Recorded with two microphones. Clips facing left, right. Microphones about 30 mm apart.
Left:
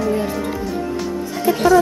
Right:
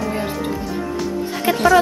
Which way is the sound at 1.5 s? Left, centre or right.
Right.